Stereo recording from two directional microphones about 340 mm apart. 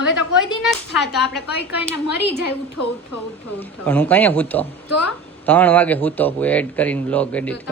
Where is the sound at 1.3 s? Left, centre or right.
Left.